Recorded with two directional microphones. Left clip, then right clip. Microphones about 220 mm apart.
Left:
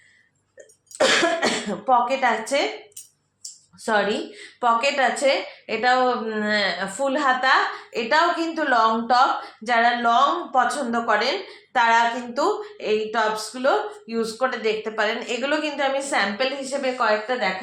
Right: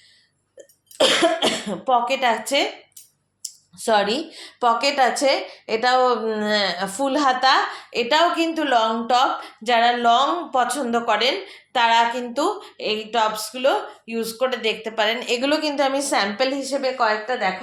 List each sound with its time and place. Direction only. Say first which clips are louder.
0.9 s throat clearing: right 1 dB; 30° right (ahead or behind)
3.4 s a woman's voice: right 4 dB; 40° right (ahead or behind)